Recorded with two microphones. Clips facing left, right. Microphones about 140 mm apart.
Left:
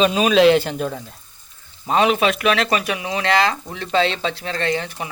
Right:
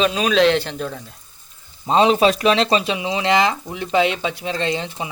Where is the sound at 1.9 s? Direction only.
25° right (ahead or behind).